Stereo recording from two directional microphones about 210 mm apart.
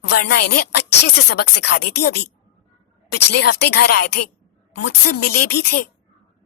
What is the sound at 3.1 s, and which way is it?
Speech, 50° left (ahead or behind).